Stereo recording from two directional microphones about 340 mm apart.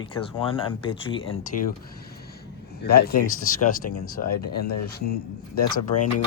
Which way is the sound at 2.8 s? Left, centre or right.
Left.